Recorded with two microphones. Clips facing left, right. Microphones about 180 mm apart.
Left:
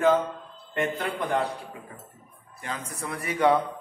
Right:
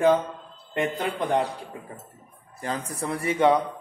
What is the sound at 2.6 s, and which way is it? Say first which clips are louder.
Speech: right 5 dB; 35° right (ahead or behind).